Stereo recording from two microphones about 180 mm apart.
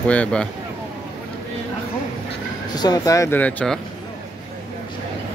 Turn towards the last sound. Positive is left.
turn(degrees=10)  # may be behind; listen again after turning